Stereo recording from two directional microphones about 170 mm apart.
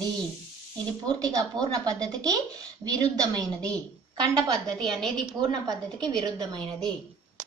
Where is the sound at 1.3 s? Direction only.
20° right (ahead or behind).